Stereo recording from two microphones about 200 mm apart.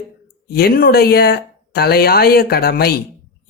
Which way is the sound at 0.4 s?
50° left (ahead or behind).